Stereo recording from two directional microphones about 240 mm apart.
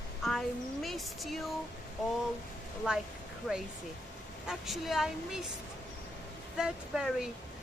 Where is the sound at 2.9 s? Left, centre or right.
Centre.